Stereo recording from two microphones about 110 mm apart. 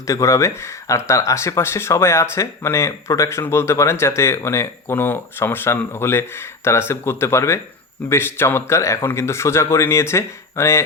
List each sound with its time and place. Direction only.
0.1 s speech: 30° left (ahead or behind)